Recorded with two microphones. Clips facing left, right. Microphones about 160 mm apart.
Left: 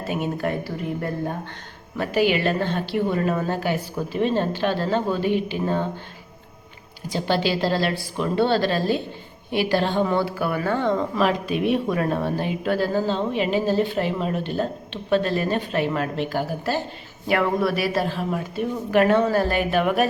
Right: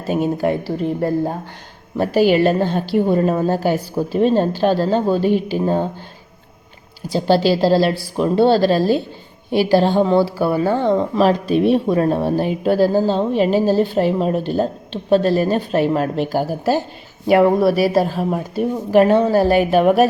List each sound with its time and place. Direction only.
0.1 s a woman's voice: 35° right (ahead or behind)
7.1 s a woman's voice: 35° right (ahead or behind)